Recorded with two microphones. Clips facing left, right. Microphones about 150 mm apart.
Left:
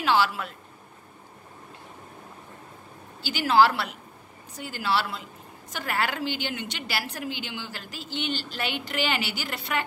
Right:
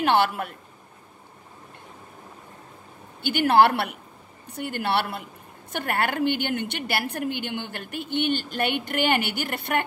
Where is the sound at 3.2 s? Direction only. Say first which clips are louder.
Right 2 dB; 60° right (ahead or behind).